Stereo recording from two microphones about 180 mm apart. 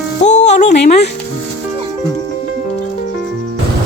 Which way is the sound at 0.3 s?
40° left (ahead or behind).